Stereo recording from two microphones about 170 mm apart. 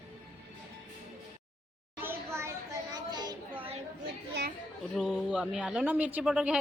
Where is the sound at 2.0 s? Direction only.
15° right (ahead or behind).